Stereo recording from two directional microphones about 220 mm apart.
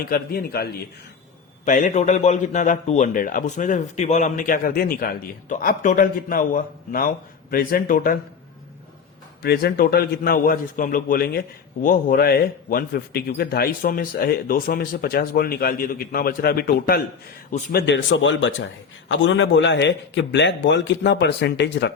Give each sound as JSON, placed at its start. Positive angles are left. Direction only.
{"t": 0.0, "sound": "a man's voice", "side_deg": 45}
{"t": 9.4, "sound": "a man's voice", "side_deg": 45}